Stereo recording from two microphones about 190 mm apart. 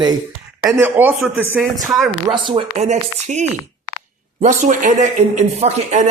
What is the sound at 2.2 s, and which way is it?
A man's voice, 25° right (ahead or behind).